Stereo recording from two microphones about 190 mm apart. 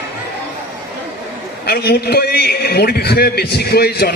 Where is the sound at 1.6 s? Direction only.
55° left (ahead or behind).